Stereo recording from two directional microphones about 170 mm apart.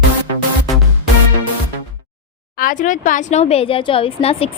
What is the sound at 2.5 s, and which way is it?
A woman's voice, 50° left (ahead or behind).